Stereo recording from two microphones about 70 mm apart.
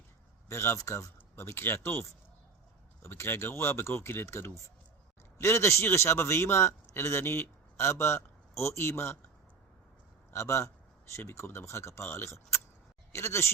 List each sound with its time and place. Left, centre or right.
0.4 s a man's voice: left
10.3 s a man's voice: left